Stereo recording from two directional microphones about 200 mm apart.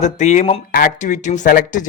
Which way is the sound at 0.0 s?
35° left (ahead or behind).